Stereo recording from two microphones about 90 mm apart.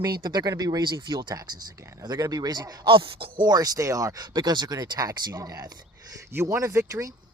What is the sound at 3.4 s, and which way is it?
Speech, 45° right (ahead or behind).